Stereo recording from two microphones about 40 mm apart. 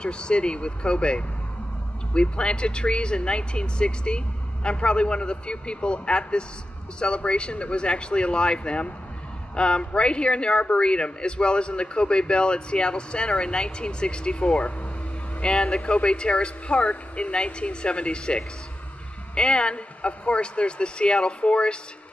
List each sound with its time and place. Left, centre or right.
0.0 s speech: left